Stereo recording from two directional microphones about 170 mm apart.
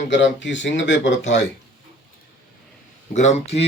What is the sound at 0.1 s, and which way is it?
Speech, 90° left.